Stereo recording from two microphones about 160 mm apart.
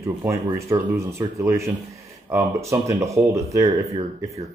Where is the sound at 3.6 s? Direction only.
40° right (ahead or behind).